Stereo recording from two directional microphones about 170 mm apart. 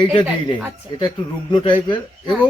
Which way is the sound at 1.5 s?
25° left (ahead or behind).